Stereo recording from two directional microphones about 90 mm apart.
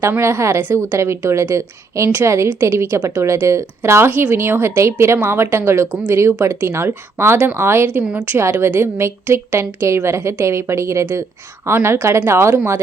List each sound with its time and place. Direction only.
0.2 s a woman's voice: 30° right (ahead or behind)
8.0 s a woman's voice: 15° right (ahead or behind)
8.4 s a woman's voice: 30° right (ahead or behind)